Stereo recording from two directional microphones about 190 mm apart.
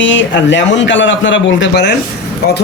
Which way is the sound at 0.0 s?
75° left (ahead or behind).